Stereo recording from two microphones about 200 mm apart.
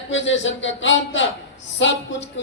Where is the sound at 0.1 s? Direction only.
70° left (ahead or behind).